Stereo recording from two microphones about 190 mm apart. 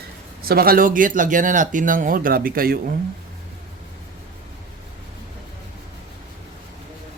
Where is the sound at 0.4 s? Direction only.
50° right (ahead or behind).